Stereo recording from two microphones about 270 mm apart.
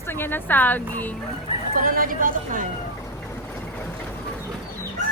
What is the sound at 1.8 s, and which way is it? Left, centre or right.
Speech, right.